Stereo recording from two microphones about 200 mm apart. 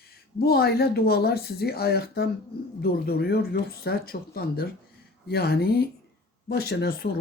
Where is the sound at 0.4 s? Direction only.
50° left (ahead or behind).